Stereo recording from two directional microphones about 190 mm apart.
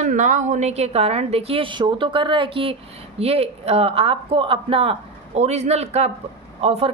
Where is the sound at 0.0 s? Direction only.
40° right (ahead or behind).